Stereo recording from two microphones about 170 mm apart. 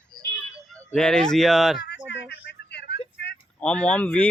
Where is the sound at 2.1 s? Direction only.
85° left.